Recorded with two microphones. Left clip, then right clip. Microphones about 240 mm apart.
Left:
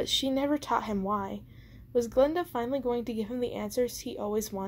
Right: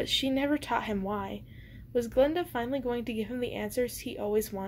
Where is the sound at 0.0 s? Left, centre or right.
Left.